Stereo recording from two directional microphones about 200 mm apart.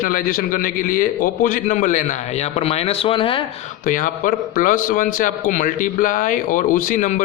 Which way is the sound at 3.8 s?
40° left (ahead or behind).